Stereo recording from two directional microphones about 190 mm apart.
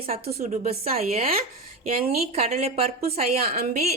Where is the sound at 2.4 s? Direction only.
35° right (ahead or behind).